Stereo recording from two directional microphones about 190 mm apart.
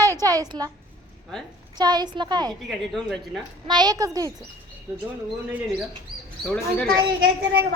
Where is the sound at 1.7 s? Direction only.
20° right (ahead or behind).